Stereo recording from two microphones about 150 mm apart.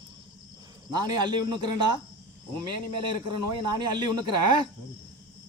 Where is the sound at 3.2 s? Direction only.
30° right (ahead or behind).